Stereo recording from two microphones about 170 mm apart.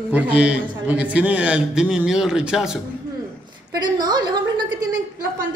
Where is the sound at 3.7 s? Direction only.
25° right (ahead or behind).